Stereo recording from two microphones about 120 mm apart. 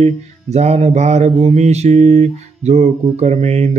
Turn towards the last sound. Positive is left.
turn(degrees=-65)  # may be behind; listen again after turning